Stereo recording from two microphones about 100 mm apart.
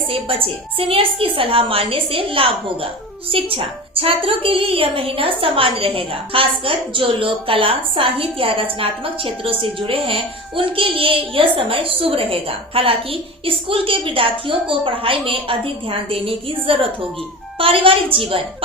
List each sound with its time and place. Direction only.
0.1 s a woman's voice: 65° right (ahead or behind)